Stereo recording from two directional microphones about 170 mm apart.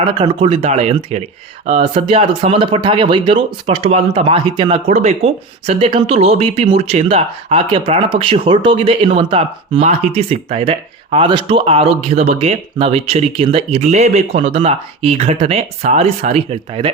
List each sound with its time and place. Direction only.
0.0 s speech: 30° right (ahead or behind)